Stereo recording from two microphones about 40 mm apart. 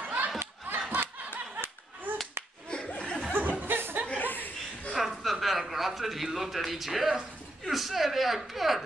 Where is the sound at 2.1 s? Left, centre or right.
Right.